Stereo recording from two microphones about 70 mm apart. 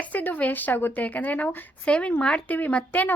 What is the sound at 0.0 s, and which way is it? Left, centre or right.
A woman's voice, left.